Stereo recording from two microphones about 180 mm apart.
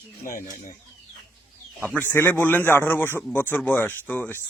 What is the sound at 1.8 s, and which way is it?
Speech, 10° left (ahead or behind).